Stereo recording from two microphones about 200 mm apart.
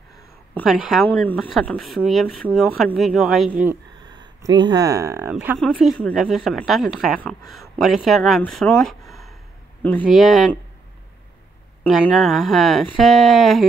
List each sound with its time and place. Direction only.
0.6 s speech: centre (ahead or behind)
4.0 s speech: 20° right (ahead or behind); by 10.6 s centre (ahead or behind)
11.8 s speech: centre (ahead or behind)